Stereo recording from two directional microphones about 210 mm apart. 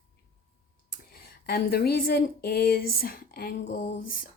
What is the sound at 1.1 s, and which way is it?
Speech, 45° left (ahead or behind).